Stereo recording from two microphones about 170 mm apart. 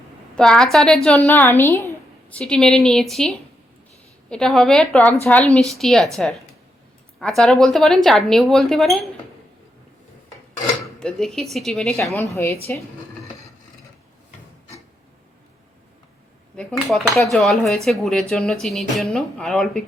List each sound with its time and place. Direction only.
0.3 s speech: 5° left (ahead or behind)
11.0 s speech: centre (ahead or behind)
12.1 s a woman's voice: 15° left (ahead or behind)
16.6 s speech: centre (ahead or behind)